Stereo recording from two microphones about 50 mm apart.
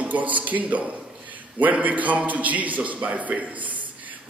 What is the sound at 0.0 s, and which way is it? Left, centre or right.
A man's voice, right.